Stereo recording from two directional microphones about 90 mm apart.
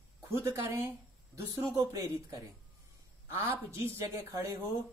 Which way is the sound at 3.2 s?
30° right (ahead or behind).